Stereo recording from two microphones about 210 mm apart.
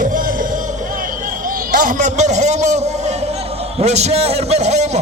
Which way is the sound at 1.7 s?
40° right (ahead or behind).